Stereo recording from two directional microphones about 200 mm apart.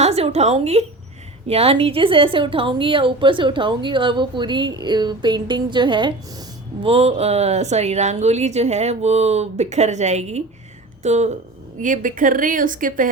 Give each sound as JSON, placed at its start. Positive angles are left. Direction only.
{"t": 0.0, "sound": "a woman's voice", "side_deg": -30}